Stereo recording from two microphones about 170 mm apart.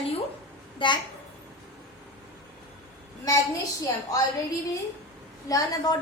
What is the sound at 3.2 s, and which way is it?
Speech, 20° left (ahead or behind).